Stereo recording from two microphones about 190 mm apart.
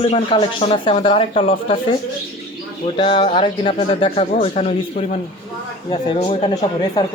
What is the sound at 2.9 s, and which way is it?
Speech, 25° left (ahead or behind).